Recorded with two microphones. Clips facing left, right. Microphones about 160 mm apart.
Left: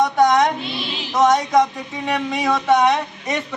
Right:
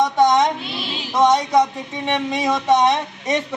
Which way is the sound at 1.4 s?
Centre (ahead or behind).